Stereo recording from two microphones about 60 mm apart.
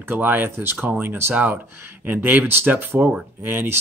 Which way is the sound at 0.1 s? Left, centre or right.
Right.